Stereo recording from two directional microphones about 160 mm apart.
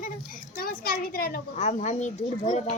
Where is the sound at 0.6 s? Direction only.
65° left (ahead or behind).